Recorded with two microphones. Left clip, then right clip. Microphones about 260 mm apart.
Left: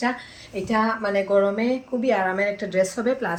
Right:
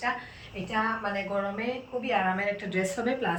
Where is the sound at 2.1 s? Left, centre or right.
Left.